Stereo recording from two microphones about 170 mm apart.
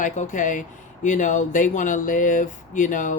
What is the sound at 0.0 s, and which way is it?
Speech, 45° left (ahead or behind).